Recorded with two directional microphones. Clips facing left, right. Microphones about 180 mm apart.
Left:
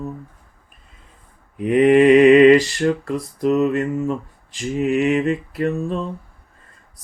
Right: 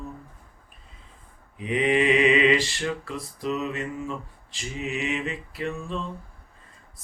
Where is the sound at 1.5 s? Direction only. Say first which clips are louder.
Left 10 dB; 50° left (ahead or behind).